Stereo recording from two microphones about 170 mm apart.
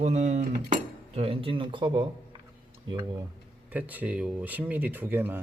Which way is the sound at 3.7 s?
10° right (ahead or behind).